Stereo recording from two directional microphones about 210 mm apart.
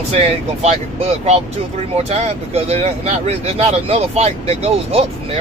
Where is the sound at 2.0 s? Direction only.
30° right (ahead or behind).